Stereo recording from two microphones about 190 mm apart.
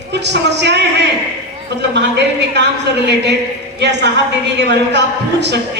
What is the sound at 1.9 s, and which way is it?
A man's voice, 65° right (ahead or behind).